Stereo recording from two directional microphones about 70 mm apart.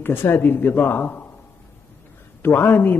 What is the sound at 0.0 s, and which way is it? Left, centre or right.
A man's voice, left.